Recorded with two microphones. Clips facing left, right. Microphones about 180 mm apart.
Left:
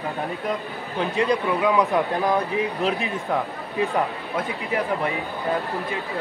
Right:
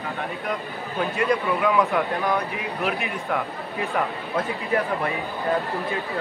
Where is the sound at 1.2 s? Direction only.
20° left (ahead or behind).